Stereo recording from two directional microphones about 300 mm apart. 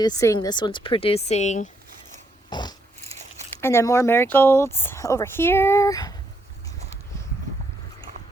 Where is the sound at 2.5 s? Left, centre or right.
Centre.